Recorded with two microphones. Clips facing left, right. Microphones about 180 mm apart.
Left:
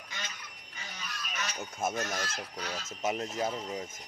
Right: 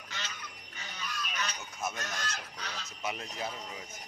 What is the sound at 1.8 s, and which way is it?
Speech, 50° left (ahead or behind).